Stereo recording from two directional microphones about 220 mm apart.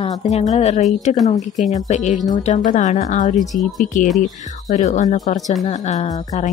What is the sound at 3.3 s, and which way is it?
Speech, centre (ahead or behind).